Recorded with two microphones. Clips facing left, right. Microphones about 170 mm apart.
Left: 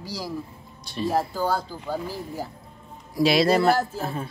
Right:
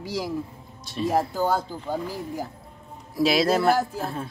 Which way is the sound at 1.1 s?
20° right (ahead or behind).